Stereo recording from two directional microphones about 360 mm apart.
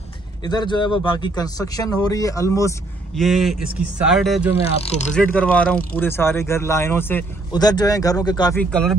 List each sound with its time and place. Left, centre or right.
0.4 s speech: centre
4.6 s speech: centre
5.1 s speech: centre